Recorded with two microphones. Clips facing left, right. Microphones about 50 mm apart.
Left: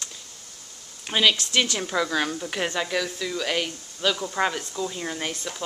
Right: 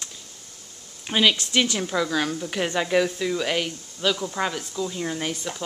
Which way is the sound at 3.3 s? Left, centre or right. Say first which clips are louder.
Right 2 dB; centre.